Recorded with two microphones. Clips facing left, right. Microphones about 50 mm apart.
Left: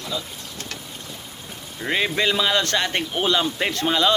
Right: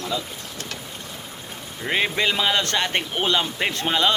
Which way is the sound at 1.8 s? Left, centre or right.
Centre.